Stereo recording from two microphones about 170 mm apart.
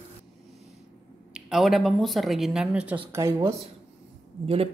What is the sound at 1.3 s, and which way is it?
Speech, 5° right (ahead or behind).